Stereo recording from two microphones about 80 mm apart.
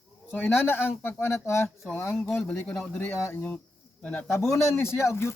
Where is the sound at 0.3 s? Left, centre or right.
Left.